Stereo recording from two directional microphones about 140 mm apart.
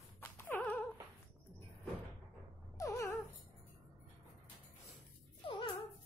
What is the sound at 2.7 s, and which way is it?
Dog, 20° left (ahead or behind).